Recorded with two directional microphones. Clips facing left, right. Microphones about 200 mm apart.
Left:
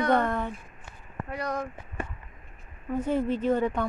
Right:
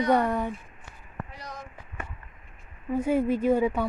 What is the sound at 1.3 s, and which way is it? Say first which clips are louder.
Speech: left 11 dB; 60° left (ahead or behind).